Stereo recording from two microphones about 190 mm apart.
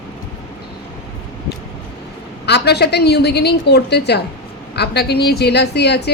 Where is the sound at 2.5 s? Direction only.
60° left (ahead or behind).